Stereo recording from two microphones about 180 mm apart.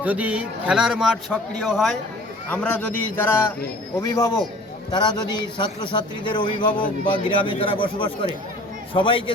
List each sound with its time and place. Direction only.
0.0 s a man's voice: 10° right (ahead or behind); by 9.3 s 30° left (ahead or behind)